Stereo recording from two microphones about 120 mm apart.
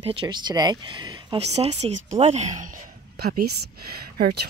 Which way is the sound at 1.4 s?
60° right (ahead or behind).